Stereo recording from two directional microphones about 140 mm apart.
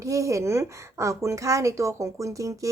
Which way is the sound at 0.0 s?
25° right (ahead or behind).